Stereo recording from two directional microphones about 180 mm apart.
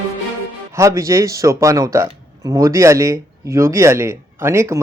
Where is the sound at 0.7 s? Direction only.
15° right (ahead or behind).